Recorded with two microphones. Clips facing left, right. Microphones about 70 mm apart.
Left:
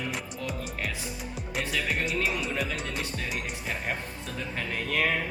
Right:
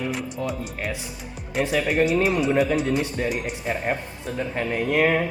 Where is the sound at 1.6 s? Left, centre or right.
Centre.